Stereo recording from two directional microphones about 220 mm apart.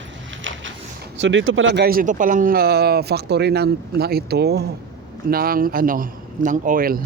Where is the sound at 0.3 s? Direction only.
60° right (ahead or behind).